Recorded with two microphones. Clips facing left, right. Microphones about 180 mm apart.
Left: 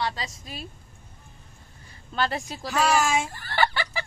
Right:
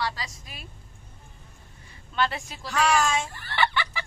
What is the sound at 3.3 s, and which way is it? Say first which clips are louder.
Fowl: left 1 dB; 40° left (ahead or behind).